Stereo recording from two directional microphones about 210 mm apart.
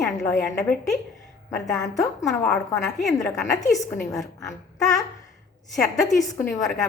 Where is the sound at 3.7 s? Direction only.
15° left (ahead or behind).